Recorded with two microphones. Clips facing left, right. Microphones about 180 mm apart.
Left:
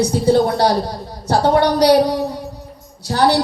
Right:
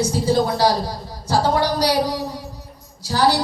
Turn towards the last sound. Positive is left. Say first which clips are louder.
# left 3 dB
turn(degrees=60)  # may be behind; listen again after turning